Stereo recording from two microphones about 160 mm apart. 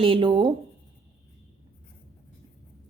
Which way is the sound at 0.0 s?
30° right (ahead or behind).